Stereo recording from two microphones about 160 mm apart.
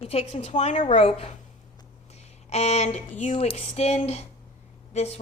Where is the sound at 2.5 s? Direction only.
40° left (ahead or behind).